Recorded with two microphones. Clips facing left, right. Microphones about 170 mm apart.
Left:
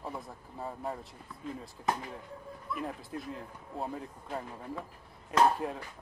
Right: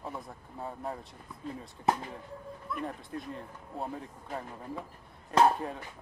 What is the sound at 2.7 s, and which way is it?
Speech, centre (ahead or behind).